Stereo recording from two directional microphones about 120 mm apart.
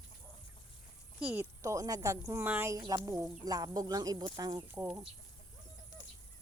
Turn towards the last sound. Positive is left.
turn(degrees=-15)  # may be behind; listen again after turning